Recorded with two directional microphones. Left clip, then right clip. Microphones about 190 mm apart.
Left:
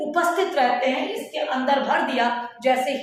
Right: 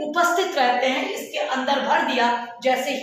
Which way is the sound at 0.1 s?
15° left (ahead or behind).